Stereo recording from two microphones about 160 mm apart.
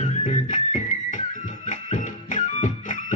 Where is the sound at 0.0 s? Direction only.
45° left (ahead or behind).